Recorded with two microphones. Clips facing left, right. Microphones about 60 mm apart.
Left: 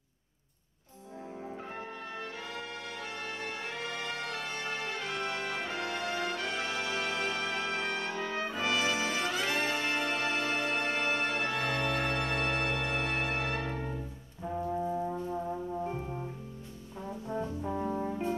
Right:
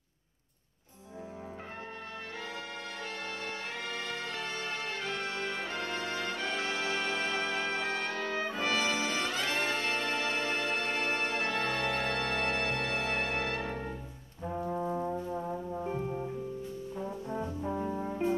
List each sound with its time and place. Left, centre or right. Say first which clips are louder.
4.1 s music: even; centre
7.8 s brass instrument: even; centre
8.5 s brass instrument: left 1 dB; left
10.0 s music: left 1 dB; centre
11.5 s music: even; centre
14.4 s brass instrument: left 1 dB; centre
15.1 s music: even; centre
17.0 s brass instrument: left 2 dB; centre
18.0 s music: right 1 dB; centre